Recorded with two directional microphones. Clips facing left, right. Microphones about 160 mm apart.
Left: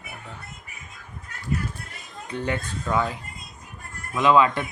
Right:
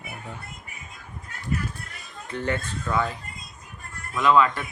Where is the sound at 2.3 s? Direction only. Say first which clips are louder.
Even; 15° left (ahead or behind).